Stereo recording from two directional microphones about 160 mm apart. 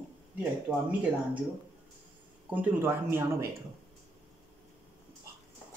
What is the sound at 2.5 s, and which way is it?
Speech, 10° right (ahead or behind).